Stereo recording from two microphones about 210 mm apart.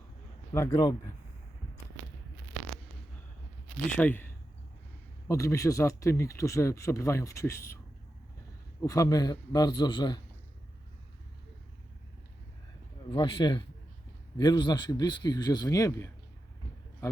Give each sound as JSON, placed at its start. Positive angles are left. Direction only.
{"t": 0.5, "sound": "speech", "side_deg": 15}
{"t": 3.8, "sound": "speech", "side_deg": 5}
{"t": 5.3, "sound": "speech", "side_deg": 15}
{"t": 8.8, "sound": "speech", "side_deg": 15}
{"t": 13.1, "sound": "speech", "side_deg": 25}